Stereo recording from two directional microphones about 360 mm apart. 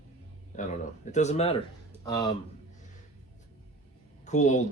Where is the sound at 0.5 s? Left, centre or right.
Centre.